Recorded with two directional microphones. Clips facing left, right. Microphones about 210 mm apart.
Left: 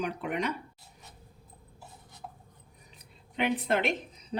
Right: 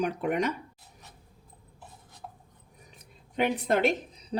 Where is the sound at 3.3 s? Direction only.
40° right (ahead or behind).